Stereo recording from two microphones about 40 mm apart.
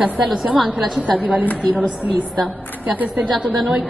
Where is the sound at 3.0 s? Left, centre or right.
Right.